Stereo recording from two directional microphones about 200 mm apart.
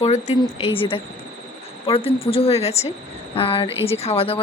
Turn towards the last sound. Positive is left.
turn(degrees=30)  # may be behind; listen again after turning